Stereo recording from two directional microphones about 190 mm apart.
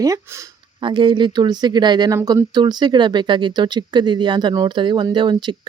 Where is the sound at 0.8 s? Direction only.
25° right (ahead or behind).